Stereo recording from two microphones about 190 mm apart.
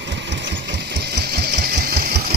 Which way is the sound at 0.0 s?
65° right (ahead or behind).